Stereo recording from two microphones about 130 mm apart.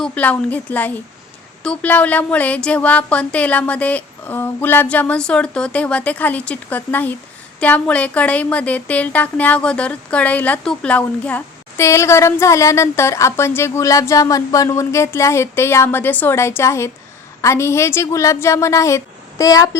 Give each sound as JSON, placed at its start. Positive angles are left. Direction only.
{"t": 0.0, "sound": "speech", "side_deg": 10}